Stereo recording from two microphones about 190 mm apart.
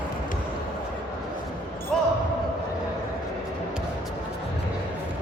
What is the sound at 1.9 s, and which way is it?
Basketball bounce, centre (ahead or behind).